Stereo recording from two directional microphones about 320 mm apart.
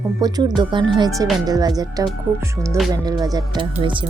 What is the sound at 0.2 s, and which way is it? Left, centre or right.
Speech, centre.